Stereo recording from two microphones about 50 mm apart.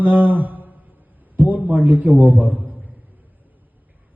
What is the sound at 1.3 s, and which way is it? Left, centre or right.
A man's voice, right.